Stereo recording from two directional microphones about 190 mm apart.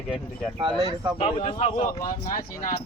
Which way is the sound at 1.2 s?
30° left (ahead or behind).